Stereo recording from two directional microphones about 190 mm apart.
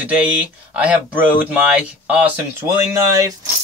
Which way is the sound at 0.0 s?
10° right (ahead or behind).